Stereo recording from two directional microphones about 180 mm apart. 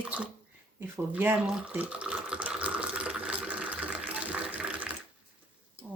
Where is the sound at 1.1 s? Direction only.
10° right (ahead or behind).